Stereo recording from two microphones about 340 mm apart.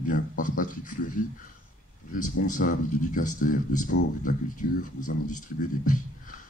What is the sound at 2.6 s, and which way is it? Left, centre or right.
Speech, left.